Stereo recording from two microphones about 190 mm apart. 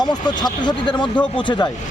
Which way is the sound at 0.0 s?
20° left (ahead or behind).